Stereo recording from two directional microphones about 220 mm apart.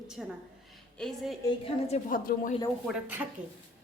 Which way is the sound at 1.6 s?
30° left (ahead or behind).